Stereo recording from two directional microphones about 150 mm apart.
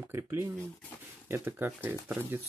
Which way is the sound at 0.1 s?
15° right (ahead or behind).